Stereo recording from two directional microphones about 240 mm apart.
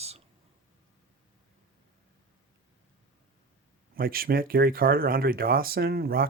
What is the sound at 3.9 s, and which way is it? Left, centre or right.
Speech, right.